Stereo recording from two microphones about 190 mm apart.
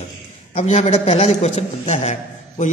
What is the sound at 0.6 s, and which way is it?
A man's voice, 40° left (ahead or behind).